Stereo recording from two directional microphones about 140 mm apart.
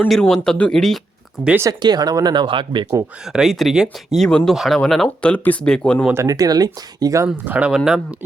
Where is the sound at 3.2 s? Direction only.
5° right (ahead or behind).